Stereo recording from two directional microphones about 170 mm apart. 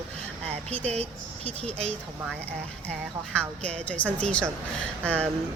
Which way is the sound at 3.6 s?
10° left (ahead or behind).